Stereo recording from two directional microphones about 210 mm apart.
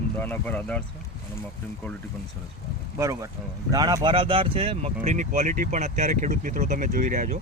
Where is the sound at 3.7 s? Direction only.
15° right (ahead or behind); by 7.3 s 40° right (ahead or behind).